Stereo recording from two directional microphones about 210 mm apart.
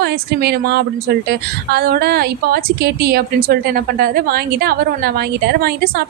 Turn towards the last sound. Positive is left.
turn(degrees=-50)  # may be behind; listen again after turning